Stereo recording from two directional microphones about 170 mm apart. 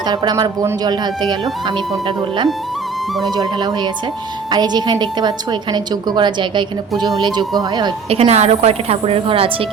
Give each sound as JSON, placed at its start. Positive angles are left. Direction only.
{"t": 0.0, "sound": "a woman's voice", "side_deg": -25}